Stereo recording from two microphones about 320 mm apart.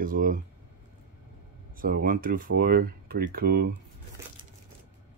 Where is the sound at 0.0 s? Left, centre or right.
Right.